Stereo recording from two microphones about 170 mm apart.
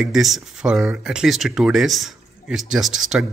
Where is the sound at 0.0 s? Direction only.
Centre (ahead or behind).